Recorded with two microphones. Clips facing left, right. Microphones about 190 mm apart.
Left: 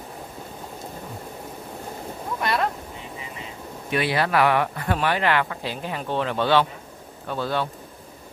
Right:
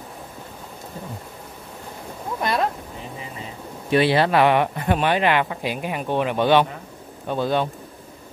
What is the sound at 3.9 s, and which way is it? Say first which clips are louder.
Speech: right 5 dB; 30° right (ahead or behind).